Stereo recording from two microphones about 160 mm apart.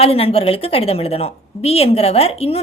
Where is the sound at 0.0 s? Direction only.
35° left (ahead or behind).